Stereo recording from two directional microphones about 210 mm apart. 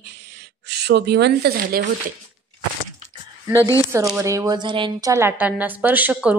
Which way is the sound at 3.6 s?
15° left (ahead or behind).